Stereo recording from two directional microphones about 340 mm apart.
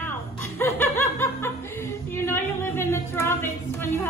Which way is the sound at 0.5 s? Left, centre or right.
Centre.